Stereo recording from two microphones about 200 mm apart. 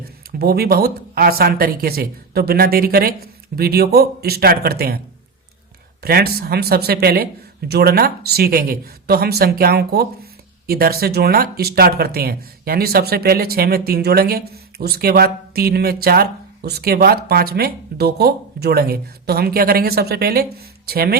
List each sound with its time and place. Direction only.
0.0 s speech: 50° right (ahead or behind)
6.0 s speech: 50° right (ahead or behind)